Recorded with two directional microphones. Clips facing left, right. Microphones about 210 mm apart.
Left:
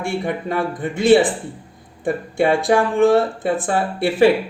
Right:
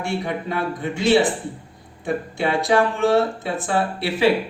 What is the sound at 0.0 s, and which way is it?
Speech, 50° left (ahead or behind).